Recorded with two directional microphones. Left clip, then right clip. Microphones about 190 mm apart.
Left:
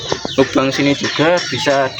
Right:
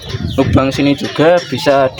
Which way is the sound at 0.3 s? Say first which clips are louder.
Right 1 dB; 60° right (ahead or behind).